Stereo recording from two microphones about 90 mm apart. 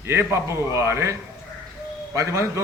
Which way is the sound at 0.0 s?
30° right (ahead or behind).